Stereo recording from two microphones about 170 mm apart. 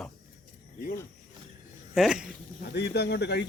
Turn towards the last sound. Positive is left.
turn(degrees=75)  # may be behind; listen again after turning